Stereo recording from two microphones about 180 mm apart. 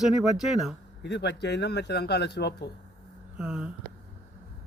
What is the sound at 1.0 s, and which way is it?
Speech, 75° left (ahead or behind).